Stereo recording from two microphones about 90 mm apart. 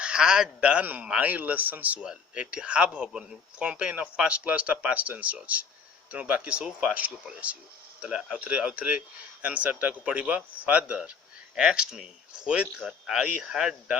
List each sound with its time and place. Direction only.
0.0 s speech: 10° right (ahead or behind)
13.1 s speech: 10° right (ahead or behind)